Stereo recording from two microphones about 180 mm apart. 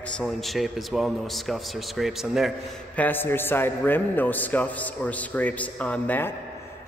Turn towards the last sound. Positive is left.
turn(degrees=10)  # may be behind; listen again after turning